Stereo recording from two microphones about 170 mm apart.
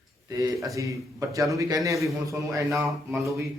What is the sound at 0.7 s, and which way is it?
A man's voice, 20° right (ahead or behind).